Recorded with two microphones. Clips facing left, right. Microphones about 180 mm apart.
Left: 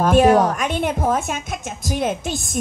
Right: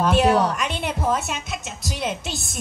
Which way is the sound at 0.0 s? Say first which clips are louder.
Left 4 dB; 50° left (ahead or behind).